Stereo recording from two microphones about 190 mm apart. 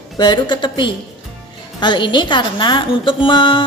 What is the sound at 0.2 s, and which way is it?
A woman's voice, 25° left (ahead or behind).